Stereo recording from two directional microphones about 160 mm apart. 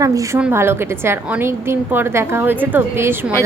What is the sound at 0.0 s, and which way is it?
A woman's voice, 20° right (ahead or behind).